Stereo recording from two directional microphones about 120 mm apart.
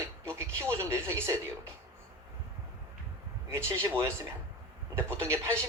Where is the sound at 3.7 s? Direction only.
20° right (ahead or behind).